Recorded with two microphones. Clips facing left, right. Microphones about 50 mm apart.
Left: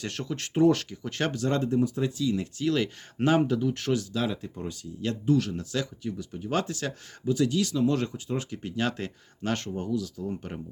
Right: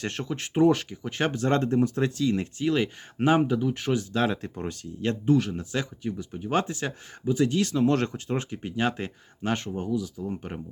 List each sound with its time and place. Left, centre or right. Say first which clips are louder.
0.0 s speech: right 2 dB; right
1.4 s speech: right 2 dB; right
2.6 s speech: right 1 dB; right
4.1 s speech: right 4 dB; right
5.0 s speech: right 2 dB; right
8.5 s speech: right 2 dB; right